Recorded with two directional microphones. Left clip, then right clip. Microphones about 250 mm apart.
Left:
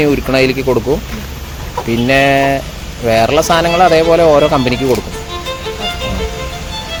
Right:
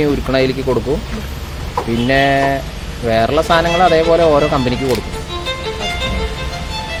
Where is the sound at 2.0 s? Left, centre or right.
Left.